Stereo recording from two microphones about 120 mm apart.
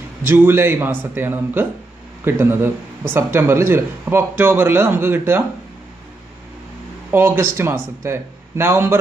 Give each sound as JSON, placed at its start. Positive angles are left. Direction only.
{"t": 0.2, "sound": "a man's voice", "side_deg": -20}
{"t": 7.1, "sound": "speech", "side_deg": -20}